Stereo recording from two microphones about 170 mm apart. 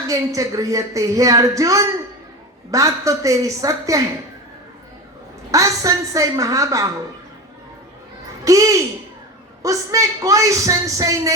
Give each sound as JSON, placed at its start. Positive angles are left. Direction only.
{"t": 0.1, "sound": "speech", "side_deg": -20}
{"t": 5.5, "sound": "speech", "side_deg": -20}
{"t": 8.4, "sound": "speech", "side_deg": -20}